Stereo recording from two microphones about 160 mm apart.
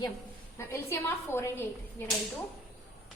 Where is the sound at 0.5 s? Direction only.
15° left (ahead or behind).